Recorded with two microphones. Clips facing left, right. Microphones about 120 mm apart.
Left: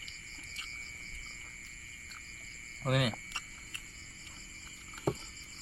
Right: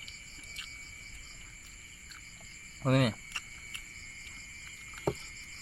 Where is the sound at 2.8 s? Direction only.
45° right (ahead or behind).